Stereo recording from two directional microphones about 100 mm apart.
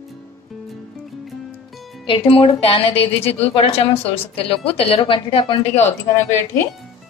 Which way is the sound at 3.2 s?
90° left.